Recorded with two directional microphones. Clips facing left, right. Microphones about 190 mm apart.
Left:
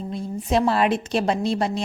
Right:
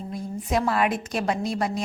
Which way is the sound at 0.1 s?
30° left (ahead or behind).